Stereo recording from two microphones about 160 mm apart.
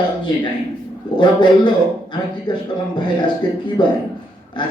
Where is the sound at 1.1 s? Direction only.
30° left (ahead or behind).